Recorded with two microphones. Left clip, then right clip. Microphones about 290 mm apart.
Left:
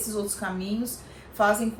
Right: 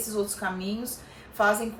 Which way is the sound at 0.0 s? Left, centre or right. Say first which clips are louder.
Right 1 dB; centre.